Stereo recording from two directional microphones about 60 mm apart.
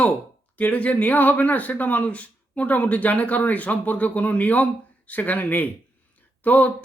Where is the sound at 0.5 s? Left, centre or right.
Left.